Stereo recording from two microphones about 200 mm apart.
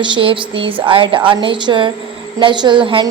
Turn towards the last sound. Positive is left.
turn(degrees=-25)  # may be behind; listen again after turning